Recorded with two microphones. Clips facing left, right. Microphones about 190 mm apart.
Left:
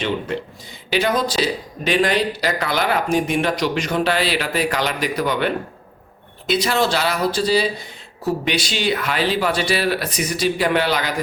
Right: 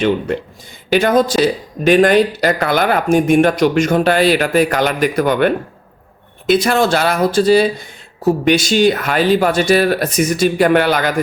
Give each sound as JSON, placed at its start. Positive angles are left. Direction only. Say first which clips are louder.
{"t": 0.9, "sound": "speech", "louder": "right 7 dB", "side_deg": -50}